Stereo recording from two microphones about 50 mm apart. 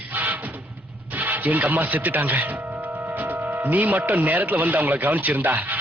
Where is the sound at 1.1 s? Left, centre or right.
Right.